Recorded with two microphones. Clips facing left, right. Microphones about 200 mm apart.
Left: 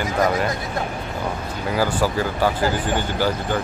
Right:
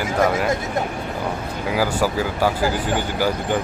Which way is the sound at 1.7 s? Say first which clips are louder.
Even; 10° right (ahead or behind).